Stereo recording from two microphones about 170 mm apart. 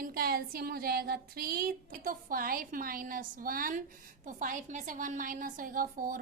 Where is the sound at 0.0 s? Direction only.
60° right (ahead or behind).